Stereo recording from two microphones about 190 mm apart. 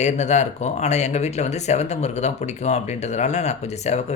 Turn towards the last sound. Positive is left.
turn(degrees=35)  # may be behind; listen again after turning